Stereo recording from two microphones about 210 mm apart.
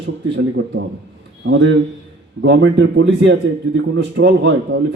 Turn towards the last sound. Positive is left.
turn(degrees=-55)  # may be behind; listen again after turning